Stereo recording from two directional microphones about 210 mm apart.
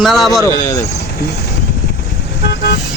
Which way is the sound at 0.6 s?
15° left (ahead or behind).